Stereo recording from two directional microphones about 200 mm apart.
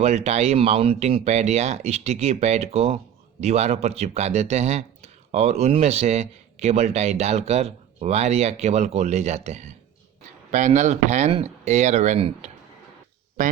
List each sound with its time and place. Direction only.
0.0 s a man's voice: 35° right (ahead or behind)